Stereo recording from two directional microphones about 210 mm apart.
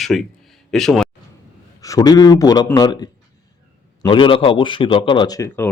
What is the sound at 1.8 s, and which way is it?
A man's voice, 15° left (ahead or behind).